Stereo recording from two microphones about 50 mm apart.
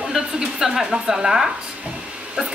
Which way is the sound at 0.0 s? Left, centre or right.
Centre.